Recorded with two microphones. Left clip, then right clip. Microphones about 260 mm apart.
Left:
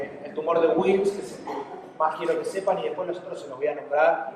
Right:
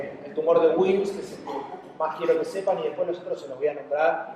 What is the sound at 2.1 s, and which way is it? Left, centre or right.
A man's voice, left.